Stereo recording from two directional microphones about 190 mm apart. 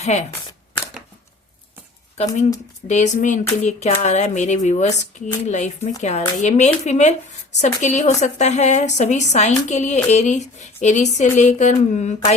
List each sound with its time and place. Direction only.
0.0 s speech: 35° left (ahead or behind)
2.1 s a woman's voice: 35° left (ahead or behind)